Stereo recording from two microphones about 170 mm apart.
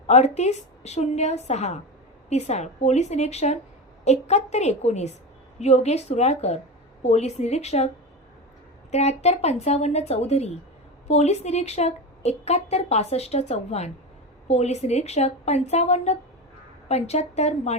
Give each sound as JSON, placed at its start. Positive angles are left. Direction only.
{"t": 0.1, "sound": "a woman's voice", "side_deg": 40}
{"t": 8.9, "sound": "a woman's voice", "side_deg": 40}